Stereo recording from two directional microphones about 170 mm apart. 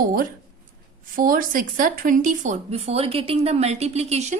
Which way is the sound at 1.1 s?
55° right (ahead or behind).